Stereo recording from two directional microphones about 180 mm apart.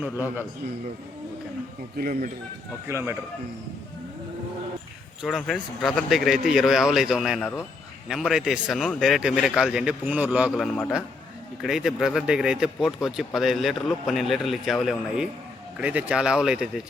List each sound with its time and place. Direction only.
0.0 s a man's voice: 10° right (ahead or behind)
2.0 s speech: 50° right (ahead or behind)
2.9 s a man's voice: 10° right (ahead or behind)
5.2 s speech: centre (ahead or behind)